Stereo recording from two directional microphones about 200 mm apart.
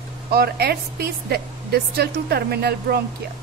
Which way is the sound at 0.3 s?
50° right (ahead or behind).